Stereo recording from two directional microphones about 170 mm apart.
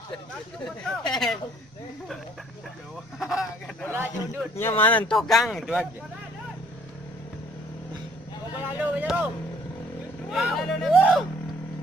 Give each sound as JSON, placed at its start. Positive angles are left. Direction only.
{"t": 1.0, "sound": "speech", "side_deg": 0}
{"t": 3.2, "sound": "speech", "side_deg": 0}
{"t": 4.6, "sound": "speech", "side_deg": 10}
{"t": 8.5, "sound": "speech", "side_deg": -10}
{"t": 10.3, "sound": "speech", "side_deg": 0}